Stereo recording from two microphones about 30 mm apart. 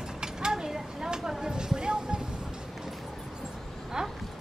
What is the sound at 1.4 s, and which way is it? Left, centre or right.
Music, right.